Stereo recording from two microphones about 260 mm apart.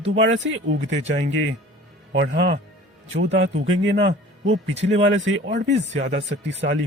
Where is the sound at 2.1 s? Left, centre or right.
Right.